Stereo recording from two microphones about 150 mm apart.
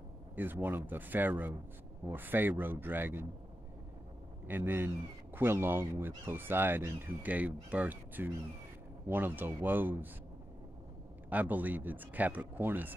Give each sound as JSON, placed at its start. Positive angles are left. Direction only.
{"t": 0.4, "sound": "speech", "side_deg": -15}
{"t": 4.5, "sound": "speech", "side_deg": -15}
{"t": 11.2, "sound": "speech", "side_deg": -10}